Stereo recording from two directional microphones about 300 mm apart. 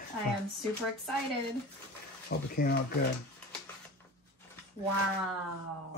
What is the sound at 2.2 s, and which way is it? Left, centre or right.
Speech, left.